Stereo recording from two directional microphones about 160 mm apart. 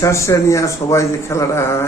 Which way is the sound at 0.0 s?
20° left (ahead or behind).